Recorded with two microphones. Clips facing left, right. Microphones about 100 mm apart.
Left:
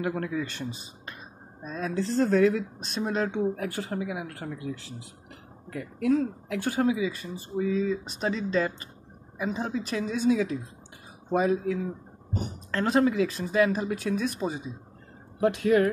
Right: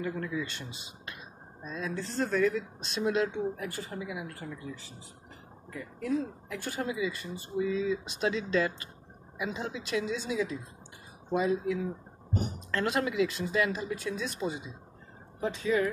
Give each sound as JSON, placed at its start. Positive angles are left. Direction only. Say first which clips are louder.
{"t": 0.0, "sound": "speech", "louder": "left 4 dB", "side_deg": 70}
{"t": 1.6, "sound": "speech", "louder": "left 4 dB", "side_deg": 45}
{"t": 2.0, "sound": "speech", "louder": "left 7 dB", "side_deg": 80}
{"t": 2.9, "sound": "speech", "louder": "even", "side_deg": 40}
{"t": 3.3, "sound": "speech", "louder": "left 5 dB", "side_deg": 65}
{"t": 5.7, "sound": "speech", "louder": "left 7 dB", "side_deg": 85}
{"t": 8.2, "sound": "speech", "louder": "left 1 dB", "side_deg": 35}
{"t": 15.4, "sound": "speech", "louder": "left 6 dB", "side_deg": 75}